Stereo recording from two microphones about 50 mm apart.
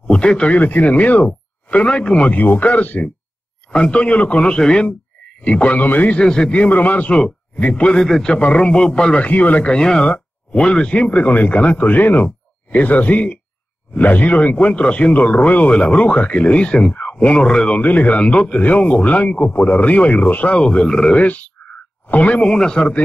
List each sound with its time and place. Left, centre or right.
0.0 s speech: centre
0.6 s a man's voice: left
2.4 s a man's voice: left
6.1 s a man's voice: centre
6.5 s a man's voice: left
9.2 s a man's voice: left
17.7 s a man's voice: left
21.2 s a man's voice: left
22.5 s a man's voice: centre